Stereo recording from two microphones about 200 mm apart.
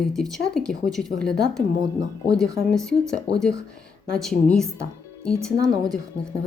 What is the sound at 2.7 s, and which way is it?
Speech, 5° left (ahead or behind).